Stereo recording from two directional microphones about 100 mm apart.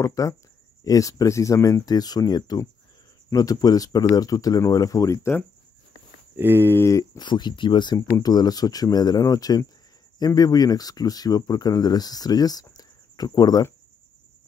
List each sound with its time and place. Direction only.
0.0 s speech: 30° left (ahead or behind)
6.3 s speech: 20° right (ahead or behind)
6.7 s speech: 30° left (ahead or behind)
7.2 s speech: 45° left (ahead or behind)